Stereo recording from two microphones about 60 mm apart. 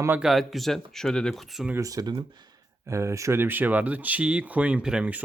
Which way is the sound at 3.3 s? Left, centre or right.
Right.